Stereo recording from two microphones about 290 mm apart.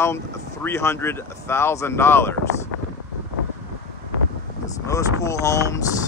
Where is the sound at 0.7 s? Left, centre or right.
Centre.